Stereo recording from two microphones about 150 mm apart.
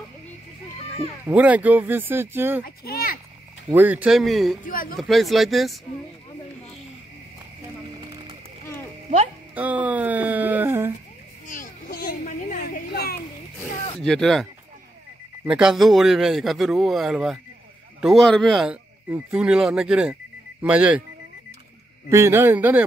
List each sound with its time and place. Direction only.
1.2 s speech: 10° right (ahead or behind)
2.6 s a child's voice: 85° left
3.7 s a man's voice: 10° right (ahead or behind)
4.6 s speech: 70° left (ahead or behind)
4.9 s a man's voice: centre (ahead or behind)
9.6 s speech: 10° right (ahead or behind)
11.4 s children playing: 60° left (ahead or behind); by 13.2 s 90° left
14.0 s a man's voice: 5° left (ahead or behind)
22.1 s speech: 15° right (ahead or behind)